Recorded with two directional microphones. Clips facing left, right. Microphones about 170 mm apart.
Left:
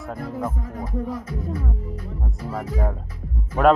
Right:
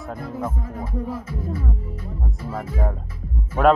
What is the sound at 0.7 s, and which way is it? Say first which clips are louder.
Music: even; 30° right (ahead or behind).